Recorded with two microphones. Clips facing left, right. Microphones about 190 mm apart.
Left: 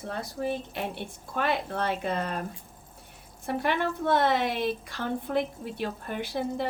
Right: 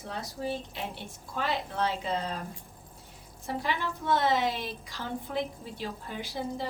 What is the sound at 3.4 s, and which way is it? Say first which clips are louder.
Speech: left 5 dB; 60° left (ahead or behind).